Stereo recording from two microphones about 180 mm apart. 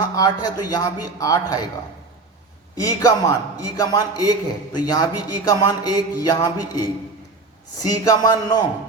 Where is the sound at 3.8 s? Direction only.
20° left (ahead or behind).